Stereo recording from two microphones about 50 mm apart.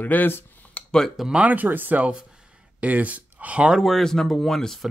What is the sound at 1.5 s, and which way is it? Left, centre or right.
Speech, right.